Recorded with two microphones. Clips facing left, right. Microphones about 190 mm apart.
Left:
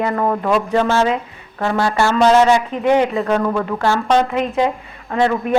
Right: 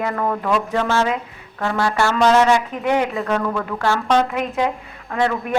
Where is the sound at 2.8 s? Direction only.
25° left (ahead or behind).